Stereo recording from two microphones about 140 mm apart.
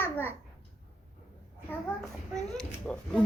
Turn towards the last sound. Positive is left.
turn(degrees=5)  # may be behind; listen again after turning